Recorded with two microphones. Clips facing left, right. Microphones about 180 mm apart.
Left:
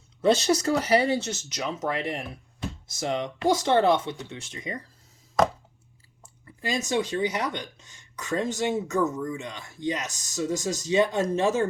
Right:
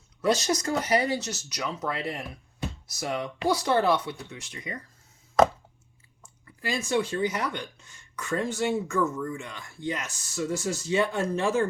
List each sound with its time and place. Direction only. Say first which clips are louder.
0.2 s speech: left 3 dB; 30° left (ahead or behind)
6.6 s speech: even; 20° left (ahead or behind)